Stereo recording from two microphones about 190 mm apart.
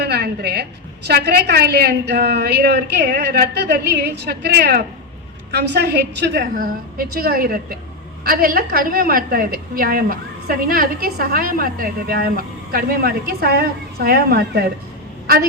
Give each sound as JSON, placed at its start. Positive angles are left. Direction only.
{"t": 0.0, "sound": "a woman's voice", "side_deg": -55}
{"t": 6.4, "sound": "a woman's voice", "side_deg": -50}